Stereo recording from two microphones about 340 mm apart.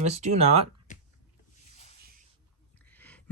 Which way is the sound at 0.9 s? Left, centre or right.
Left.